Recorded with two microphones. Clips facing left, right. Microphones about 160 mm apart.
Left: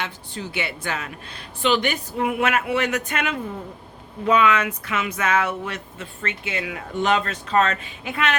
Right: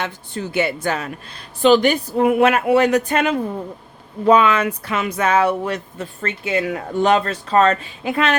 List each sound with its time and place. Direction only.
0.0 s speech: 50° right (ahead or behind); by 8.4 s 35° right (ahead or behind)